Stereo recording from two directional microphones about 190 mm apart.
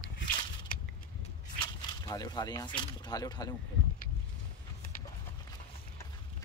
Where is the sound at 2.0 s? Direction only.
20° left (ahead or behind).